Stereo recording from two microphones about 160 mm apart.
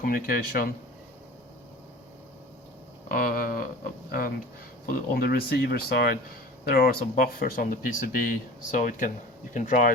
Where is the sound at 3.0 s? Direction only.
65° left (ahead or behind).